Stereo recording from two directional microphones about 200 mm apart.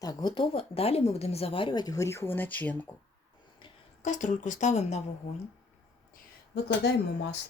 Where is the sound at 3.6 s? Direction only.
25° left (ahead or behind).